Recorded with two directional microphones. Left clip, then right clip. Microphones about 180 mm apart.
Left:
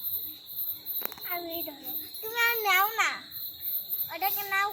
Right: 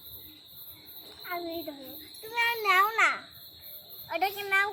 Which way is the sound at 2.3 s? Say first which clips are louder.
Left 1 dB; 25° right (ahead or behind).